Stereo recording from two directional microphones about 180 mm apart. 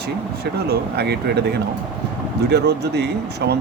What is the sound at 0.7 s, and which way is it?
Speech, 65° right (ahead or behind).